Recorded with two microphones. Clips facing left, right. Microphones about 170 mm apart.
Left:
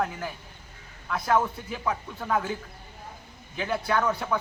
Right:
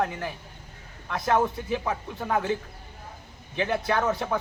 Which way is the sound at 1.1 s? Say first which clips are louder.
Right 1 dB; 25° right (ahead or behind).